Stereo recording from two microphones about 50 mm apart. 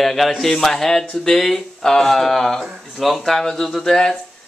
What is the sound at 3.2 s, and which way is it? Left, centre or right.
Speech, centre.